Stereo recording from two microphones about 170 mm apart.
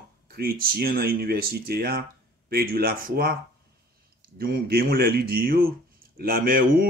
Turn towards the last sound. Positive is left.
turn(degrees=-60)  # may be behind; listen again after turning